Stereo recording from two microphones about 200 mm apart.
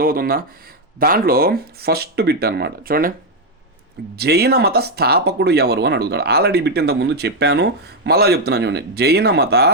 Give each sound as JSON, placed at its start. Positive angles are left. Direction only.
{"t": 0.0, "sound": "speech", "side_deg": -45}
{"t": 4.1, "sound": "speech", "side_deg": -55}